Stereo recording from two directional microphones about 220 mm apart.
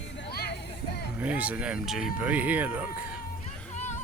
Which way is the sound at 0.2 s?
45° left (ahead or behind).